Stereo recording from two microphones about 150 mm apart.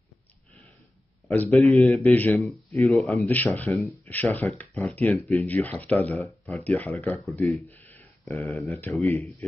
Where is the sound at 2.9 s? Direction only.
Centre (ahead or behind).